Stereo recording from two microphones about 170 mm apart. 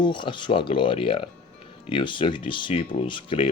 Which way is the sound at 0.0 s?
30° left (ahead or behind).